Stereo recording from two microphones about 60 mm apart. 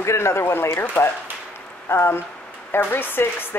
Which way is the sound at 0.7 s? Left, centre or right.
Left.